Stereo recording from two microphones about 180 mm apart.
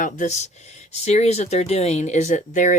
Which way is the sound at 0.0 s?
40° left (ahead or behind).